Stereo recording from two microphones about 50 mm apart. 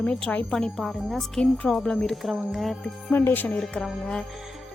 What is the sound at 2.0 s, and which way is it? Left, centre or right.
Speech, centre.